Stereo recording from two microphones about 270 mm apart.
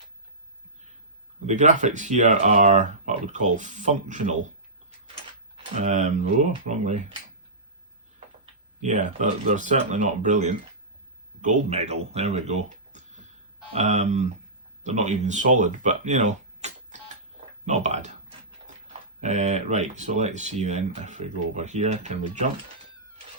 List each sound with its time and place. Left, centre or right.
1.5 s speech: right
5.8 s speech: right
8.8 s speech: right
19.2 s speech: right